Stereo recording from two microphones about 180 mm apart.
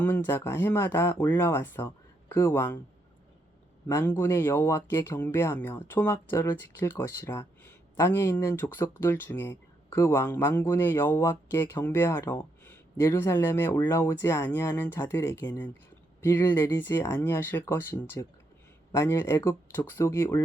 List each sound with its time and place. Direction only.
0.0 s speech: 15° left (ahead or behind)
4.0 s speech: 10° left (ahead or behind)